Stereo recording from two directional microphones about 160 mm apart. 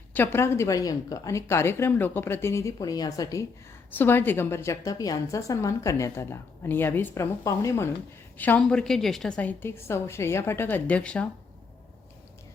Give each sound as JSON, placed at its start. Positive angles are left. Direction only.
{"t": 0.1, "sound": "a woman's voice", "side_deg": 15}